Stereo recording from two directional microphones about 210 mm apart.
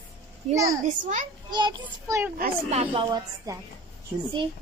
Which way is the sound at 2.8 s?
25° right (ahead or behind).